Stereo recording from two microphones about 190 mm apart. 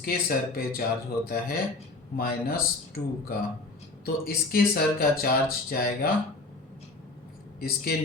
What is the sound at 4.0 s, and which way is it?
Speech, 50° left (ahead or behind).